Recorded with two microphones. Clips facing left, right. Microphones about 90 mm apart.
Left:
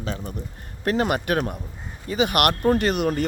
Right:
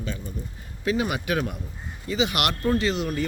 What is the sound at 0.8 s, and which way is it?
Speech, 55° left (ahead or behind).